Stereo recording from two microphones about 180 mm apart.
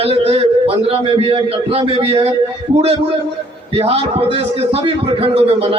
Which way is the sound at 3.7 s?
30° right (ahead or behind).